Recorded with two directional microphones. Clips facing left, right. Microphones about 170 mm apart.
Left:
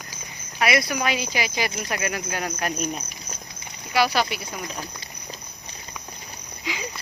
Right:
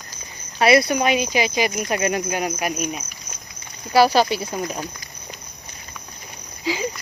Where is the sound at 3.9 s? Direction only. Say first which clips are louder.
Right 6 dB; 35° right (ahead or behind).